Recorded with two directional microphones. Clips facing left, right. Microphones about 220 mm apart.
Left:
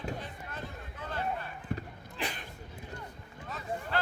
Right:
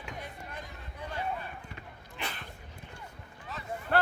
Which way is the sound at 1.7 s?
50° left (ahead or behind).